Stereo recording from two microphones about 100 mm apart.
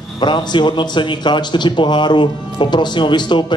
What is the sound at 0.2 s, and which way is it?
A man's voice, 50° left (ahead or behind).